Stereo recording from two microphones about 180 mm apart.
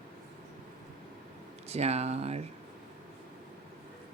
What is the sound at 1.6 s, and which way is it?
Speech, 35° right (ahead or behind).